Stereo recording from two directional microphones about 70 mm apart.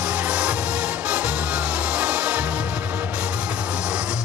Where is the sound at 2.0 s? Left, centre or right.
Centre.